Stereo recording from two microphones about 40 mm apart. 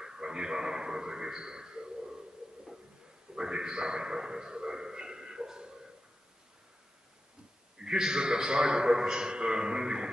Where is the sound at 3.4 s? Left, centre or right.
Centre.